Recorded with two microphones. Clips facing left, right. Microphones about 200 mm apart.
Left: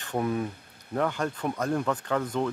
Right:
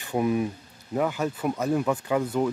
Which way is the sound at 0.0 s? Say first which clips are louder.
Right 4 dB; 10° right (ahead or behind).